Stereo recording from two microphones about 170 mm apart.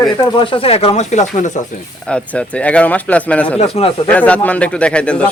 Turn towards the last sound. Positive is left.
turn(degrees=5)  # may be behind; listen again after turning